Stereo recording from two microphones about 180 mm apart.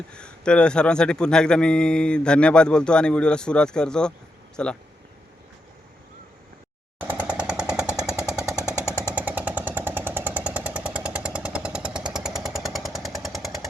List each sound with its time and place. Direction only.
0.1 s a man's voice: 5° left (ahead or behind)
7.0 s jackhammer: 10° right (ahead or behind)
8.0 s a sound: 15° left (ahead or behind)
9.1 s vehicle: 10° right (ahead or behind)